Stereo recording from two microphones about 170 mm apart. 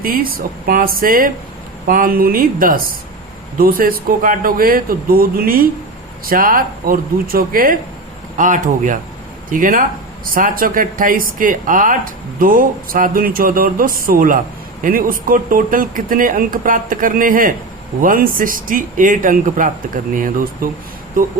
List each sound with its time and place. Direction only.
0.0 s speech: 60° right (ahead or behind)